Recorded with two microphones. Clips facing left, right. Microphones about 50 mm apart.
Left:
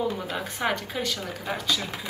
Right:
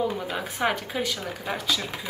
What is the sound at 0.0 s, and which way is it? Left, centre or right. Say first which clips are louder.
Speech: right 1 dB; centre.